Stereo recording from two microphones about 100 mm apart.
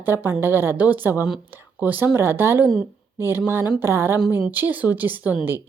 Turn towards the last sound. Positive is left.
turn(degrees=-15)  # may be behind; listen again after turning